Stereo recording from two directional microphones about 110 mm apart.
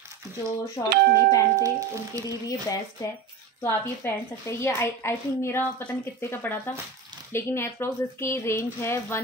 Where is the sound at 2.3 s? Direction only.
30° left (ahead or behind).